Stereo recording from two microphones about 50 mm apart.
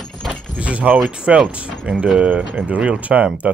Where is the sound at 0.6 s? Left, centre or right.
Right.